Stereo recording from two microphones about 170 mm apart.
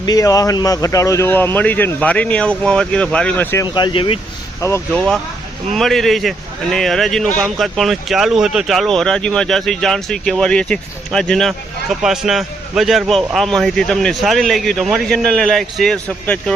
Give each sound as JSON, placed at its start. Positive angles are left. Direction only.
{"t": 0.0, "sound": "speech", "side_deg": 20}
{"t": 3.8, "sound": "speech", "side_deg": 25}
{"t": 4.9, "sound": "speech", "side_deg": 5}